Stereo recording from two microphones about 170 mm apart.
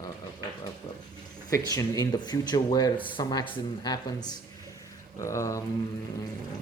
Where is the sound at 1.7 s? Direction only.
20° left (ahead or behind).